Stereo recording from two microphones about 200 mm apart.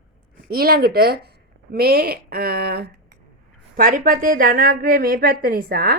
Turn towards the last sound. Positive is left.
turn(degrees=-50)  # may be behind; listen again after turning